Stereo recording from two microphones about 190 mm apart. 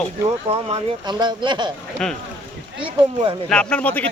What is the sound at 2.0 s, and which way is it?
Speech, 5° left (ahead or behind).